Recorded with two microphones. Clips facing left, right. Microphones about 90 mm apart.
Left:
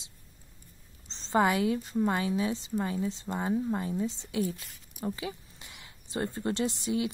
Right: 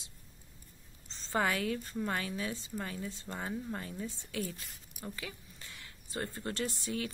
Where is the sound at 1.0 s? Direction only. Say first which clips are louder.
Left 6 dB; 25° left (ahead or behind).